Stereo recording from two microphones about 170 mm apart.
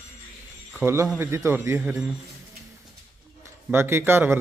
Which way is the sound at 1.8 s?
5° right (ahead or behind).